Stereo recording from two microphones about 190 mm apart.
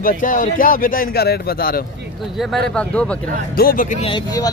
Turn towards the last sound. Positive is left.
turn(degrees=20)  # may be behind; listen again after turning